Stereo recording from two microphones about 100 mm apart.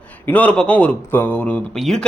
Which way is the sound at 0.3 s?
15° left (ahead or behind).